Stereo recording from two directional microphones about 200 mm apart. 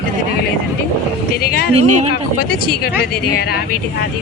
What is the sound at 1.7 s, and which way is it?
Speech, 30° right (ahead or behind).